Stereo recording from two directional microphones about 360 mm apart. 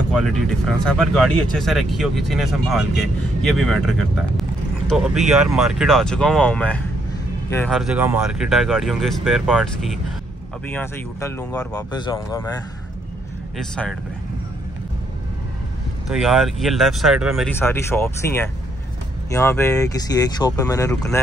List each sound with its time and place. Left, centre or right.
0.1 s speech: centre
13.6 s speech: centre
16.1 s speech: centre